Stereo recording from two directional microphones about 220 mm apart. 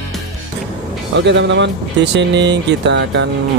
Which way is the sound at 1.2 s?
55° right (ahead or behind).